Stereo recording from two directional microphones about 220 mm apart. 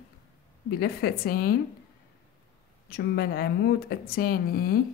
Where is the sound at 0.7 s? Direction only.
45° left (ahead or behind).